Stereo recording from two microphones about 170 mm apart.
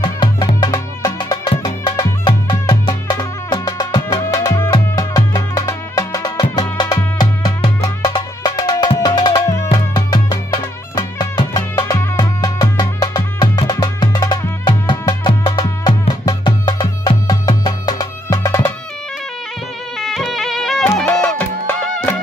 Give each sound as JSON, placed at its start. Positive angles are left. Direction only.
{"t": 0.0, "sound": "music", "side_deg": 25}
{"t": 20.0, "sound": "music", "side_deg": 0}